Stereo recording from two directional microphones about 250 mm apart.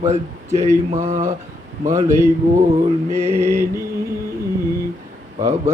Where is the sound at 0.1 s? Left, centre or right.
Right.